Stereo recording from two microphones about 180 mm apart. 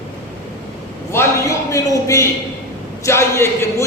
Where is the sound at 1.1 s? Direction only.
15° left (ahead or behind).